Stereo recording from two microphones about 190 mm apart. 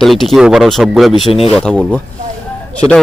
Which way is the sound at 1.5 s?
5° left (ahead or behind).